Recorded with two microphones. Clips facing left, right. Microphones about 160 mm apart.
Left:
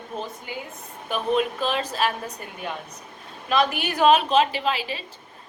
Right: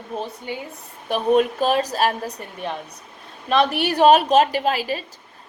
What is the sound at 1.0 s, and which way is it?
Speech, 40° right (ahead or behind).